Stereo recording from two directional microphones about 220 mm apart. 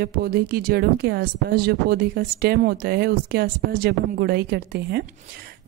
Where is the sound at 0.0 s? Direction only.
45° right (ahead or behind).